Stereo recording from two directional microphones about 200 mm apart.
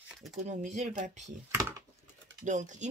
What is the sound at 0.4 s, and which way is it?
Speech, 35° right (ahead or behind).